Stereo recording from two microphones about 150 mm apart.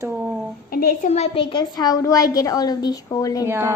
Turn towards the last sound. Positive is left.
turn(degrees=-15)  # may be behind; listen again after turning